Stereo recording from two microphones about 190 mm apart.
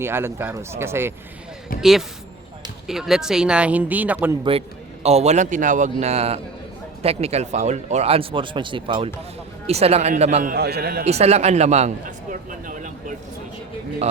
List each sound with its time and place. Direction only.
0.0 s speech: 10° right (ahead or behind)
1.8 s speech: centre (ahead or behind)
5.0 s a man's voice: 35° right (ahead or behind); by 11.0 s 55° right (ahead or behind)
11.0 s a man's voice: 35° right (ahead or behind)